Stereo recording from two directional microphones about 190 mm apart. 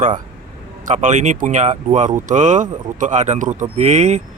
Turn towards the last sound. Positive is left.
turn(degrees=-35)  # may be behind; listen again after turning